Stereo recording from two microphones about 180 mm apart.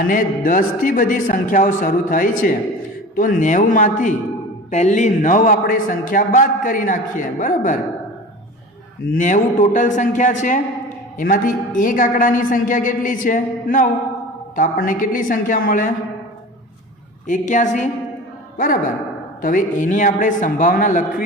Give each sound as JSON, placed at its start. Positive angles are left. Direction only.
{"t": 0.1, "sound": "a man's voice", "side_deg": 50}
{"t": 9.0, "sound": "a man's voice", "side_deg": 45}
{"t": 17.2, "sound": "a man's voice", "side_deg": 45}